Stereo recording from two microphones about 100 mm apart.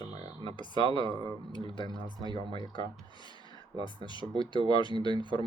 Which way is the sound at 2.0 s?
45° right (ahead or behind).